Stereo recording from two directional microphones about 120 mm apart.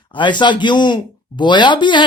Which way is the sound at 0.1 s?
40° left (ahead or behind).